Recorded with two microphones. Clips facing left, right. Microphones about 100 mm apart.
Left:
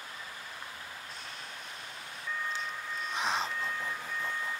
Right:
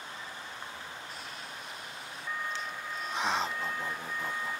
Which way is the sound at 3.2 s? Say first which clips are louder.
Right 2 dB; 20° right (ahead or behind).